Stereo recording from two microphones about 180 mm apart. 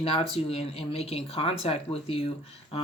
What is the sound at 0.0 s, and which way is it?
Speech, 30° left (ahead or behind).